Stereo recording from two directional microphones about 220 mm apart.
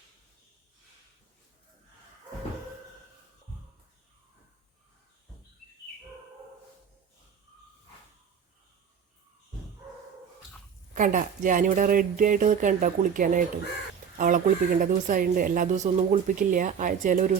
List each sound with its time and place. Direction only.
10.9 s speech: 35° right (ahead or behind)